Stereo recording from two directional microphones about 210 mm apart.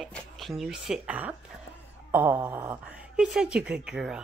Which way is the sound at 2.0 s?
10° right (ahead or behind).